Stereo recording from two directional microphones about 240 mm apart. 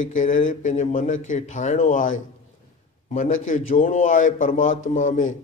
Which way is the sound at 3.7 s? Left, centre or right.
Left.